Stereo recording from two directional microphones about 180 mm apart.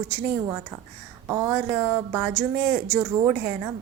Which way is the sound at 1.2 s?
15° right (ahead or behind).